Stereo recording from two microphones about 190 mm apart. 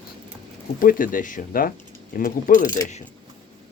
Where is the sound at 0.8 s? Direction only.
45° left (ahead or behind).